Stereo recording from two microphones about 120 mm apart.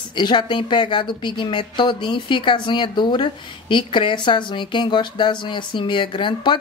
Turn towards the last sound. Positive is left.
turn(degrees=40)  # may be behind; listen again after turning